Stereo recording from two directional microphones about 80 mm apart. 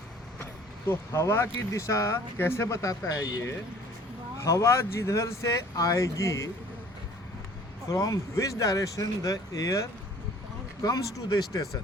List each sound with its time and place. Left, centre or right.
0.9 s speech: left
7.9 s speech: left